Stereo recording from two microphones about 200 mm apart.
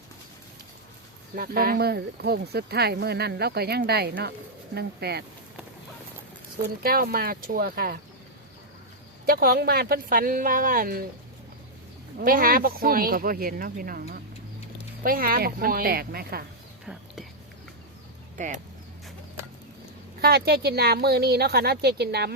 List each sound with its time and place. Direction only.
1.4 s speech: 50° right (ahead or behind)
6.8 s speech: 50° right (ahead or behind)
9.2 s speech: 50° right (ahead or behind)
12.2 s speech: 45° right (ahead or behind)
16.8 s whispering: 5° right (ahead or behind)
18.3 s speech: 40° right (ahead or behind)
20.2 s speech: 50° right (ahead or behind)